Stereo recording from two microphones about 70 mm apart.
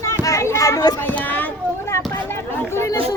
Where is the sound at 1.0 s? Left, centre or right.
Left.